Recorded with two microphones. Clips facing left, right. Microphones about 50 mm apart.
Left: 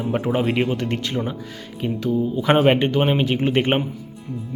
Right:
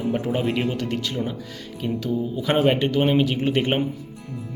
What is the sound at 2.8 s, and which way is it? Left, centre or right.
Speech, left.